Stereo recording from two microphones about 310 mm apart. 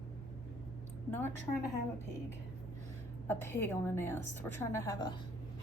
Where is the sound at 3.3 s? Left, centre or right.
Centre.